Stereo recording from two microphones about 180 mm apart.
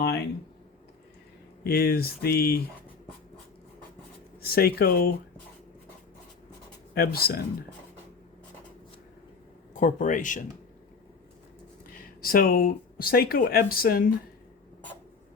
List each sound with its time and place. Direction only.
1.6 s speech: 60° left (ahead or behind)
4.4 s speech: 55° left (ahead or behind)
6.9 s speech: 55° left (ahead or behind)
9.8 s speech: 45° left (ahead or behind)
11.9 s speech: 55° left (ahead or behind)